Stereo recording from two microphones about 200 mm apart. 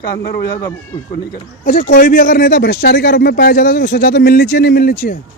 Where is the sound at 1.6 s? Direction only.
45° left (ahead or behind).